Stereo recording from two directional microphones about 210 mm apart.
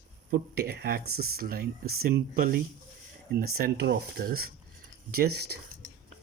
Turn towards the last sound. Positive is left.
turn(degrees=-50)  # may be behind; listen again after turning